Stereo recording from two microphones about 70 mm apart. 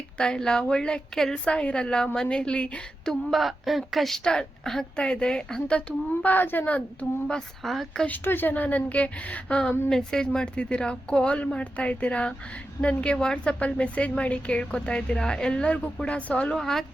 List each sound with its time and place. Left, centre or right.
0.2 s a woman's voice: centre
6.2 s a woman's voice: left
7.3 s speech: centre
8.0 s a woman's voice: left
16.6 s a woman's voice: centre